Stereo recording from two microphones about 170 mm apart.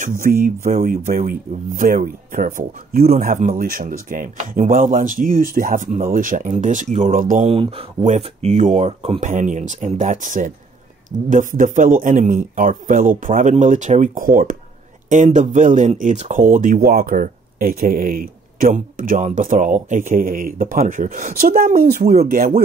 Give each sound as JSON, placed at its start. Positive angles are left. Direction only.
{"t": 0.2, "sound": "speech", "side_deg": -55}
{"t": 7.4, "sound": "speech", "side_deg": -35}